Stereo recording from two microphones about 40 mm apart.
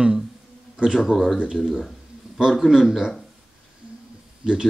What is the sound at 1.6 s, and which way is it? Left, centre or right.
Speech, centre.